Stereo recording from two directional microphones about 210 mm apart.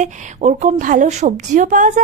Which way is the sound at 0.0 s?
35° right (ahead or behind).